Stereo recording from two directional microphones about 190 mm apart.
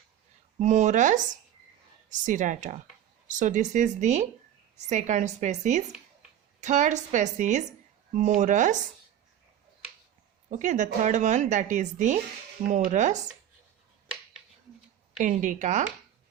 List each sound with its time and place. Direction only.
0.6 s speech: 40° right (ahead or behind)
10.5 s speech: 40° right (ahead or behind)
15.2 s a woman's voice: 40° right (ahead or behind)